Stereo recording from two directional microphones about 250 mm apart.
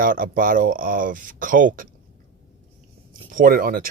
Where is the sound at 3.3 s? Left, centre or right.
Right.